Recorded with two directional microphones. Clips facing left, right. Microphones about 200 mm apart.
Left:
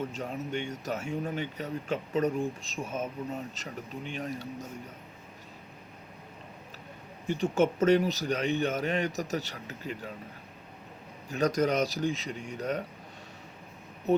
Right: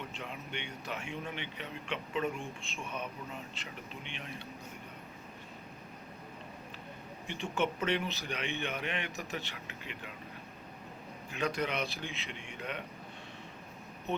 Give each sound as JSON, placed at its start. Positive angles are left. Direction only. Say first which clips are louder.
{"t": 0.0, "sound": "speech", "louder": "left 9 dB", "side_deg": 40}
{"t": 7.3, "sound": "speech", "louder": "left 8 dB", "side_deg": 40}
{"t": 11.3, "sound": "speech", "louder": "left 8 dB", "side_deg": 40}